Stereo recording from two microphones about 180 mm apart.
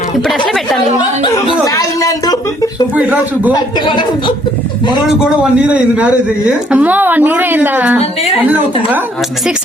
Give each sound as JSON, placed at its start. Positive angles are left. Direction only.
{"t": 0.2, "sound": "a sound", "side_deg": 0}
{"t": 1.2, "sound": "speech", "side_deg": 20}
{"t": 2.9, "sound": "a woman's voice", "side_deg": -10}
{"t": 3.5, "sound": "speech", "side_deg": 25}
{"t": 5.0, "sound": "a woman's voice", "side_deg": -5}